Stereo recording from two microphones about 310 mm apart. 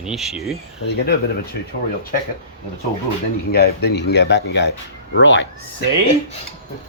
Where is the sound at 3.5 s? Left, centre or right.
Left.